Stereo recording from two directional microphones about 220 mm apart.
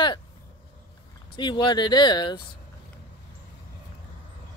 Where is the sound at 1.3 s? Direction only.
20° left (ahead or behind).